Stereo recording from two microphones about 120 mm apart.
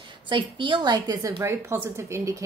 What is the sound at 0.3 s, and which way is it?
A woman's voice, 45° right (ahead or behind).